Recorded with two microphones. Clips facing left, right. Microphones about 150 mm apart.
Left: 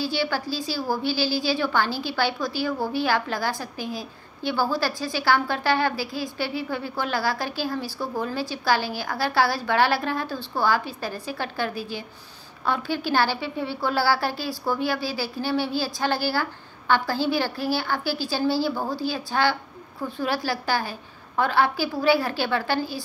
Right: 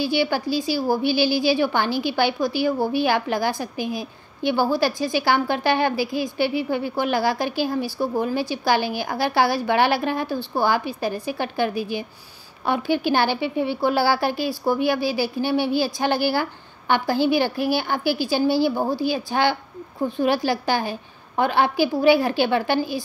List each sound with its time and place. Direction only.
0.0 s a woman's voice: 15° right (ahead or behind)